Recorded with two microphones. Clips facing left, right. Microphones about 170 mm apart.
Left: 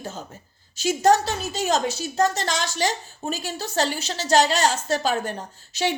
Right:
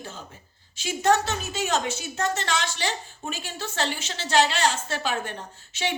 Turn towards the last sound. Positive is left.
turn(degrees=40)  # may be behind; listen again after turning